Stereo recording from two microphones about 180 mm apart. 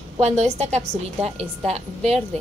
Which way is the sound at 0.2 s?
35° right (ahead or behind).